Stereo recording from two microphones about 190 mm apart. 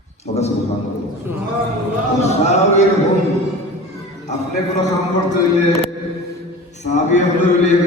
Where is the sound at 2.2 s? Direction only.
35° left (ahead or behind).